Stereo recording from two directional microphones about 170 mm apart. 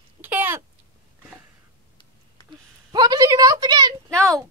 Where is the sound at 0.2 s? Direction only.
10° right (ahead or behind).